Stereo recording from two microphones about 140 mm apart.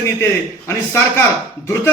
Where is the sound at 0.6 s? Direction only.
20° left (ahead or behind).